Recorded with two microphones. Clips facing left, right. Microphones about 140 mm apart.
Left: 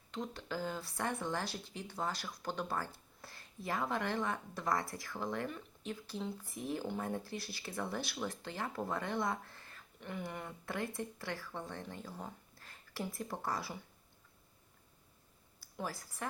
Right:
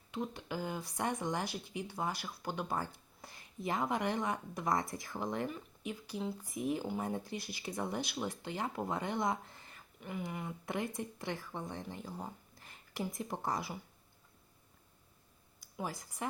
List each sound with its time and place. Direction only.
0.1 s speech: 10° right (ahead or behind)
10.0 s speech: 5° right (ahead or behind)
10.7 s speech: 20° right (ahead or behind)
15.6 s speech: 15° right (ahead or behind)